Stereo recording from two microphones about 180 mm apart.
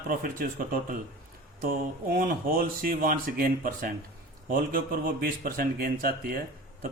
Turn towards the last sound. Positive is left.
turn(degrees=-55)  # may be behind; listen again after turning